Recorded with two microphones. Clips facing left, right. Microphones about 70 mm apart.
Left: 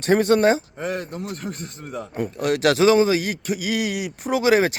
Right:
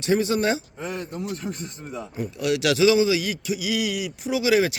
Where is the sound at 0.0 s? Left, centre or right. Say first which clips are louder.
Left 5 dB; left.